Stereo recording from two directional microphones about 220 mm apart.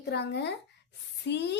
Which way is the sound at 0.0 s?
50° left (ahead or behind).